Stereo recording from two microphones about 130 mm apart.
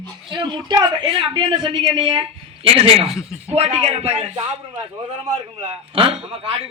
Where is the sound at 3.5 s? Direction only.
50° right (ahead or behind).